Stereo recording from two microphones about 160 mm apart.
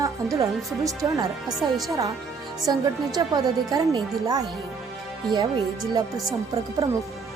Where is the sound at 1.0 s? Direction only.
15° right (ahead or behind).